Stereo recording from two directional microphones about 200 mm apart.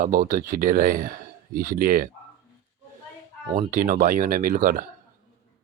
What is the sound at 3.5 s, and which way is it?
Speech, 40° right (ahead or behind).